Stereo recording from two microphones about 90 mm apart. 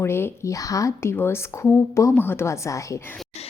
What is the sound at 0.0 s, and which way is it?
Speech, 30° left (ahead or behind).